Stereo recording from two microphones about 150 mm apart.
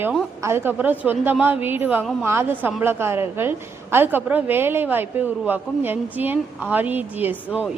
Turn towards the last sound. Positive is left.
turn(degrees=-10)  # may be behind; listen again after turning